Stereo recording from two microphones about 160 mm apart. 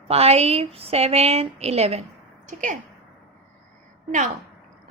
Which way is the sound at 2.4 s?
55° right (ahead or behind).